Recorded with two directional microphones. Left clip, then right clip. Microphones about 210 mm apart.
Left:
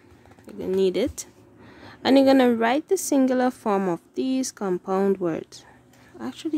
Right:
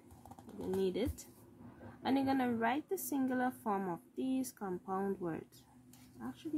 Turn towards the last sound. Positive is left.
turn(degrees=50)  # may be behind; listen again after turning